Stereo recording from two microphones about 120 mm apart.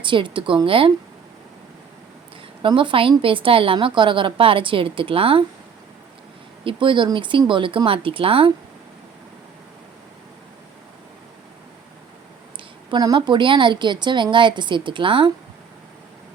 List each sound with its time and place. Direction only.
0.0 s a woman's voice: 45° right (ahead or behind)
2.6 s a woman's voice: 45° right (ahead or behind)
6.7 s a woman's voice: 45° right (ahead or behind)
12.9 s a woman's voice: 35° right (ahead or behind)